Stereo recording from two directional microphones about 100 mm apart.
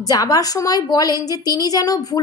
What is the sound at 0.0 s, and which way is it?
A woman's voice, 40° left (ahead or behind).